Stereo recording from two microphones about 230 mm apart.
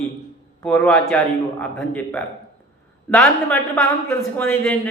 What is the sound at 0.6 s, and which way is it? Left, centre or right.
A man's voice, centre.